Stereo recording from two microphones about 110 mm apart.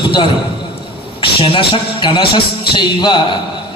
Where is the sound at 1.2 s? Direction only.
50° left (ahead or behind).